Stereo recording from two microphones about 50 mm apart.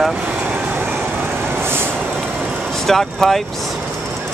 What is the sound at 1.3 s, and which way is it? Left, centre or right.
Vehicle, right.